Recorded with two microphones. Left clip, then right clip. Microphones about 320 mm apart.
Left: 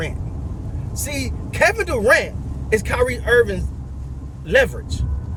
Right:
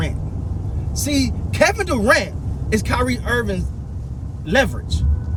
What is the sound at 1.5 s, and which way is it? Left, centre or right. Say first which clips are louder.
Speech: even; centre.